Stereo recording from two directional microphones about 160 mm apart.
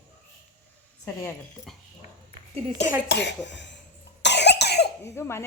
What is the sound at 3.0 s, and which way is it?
Speech, 90° left.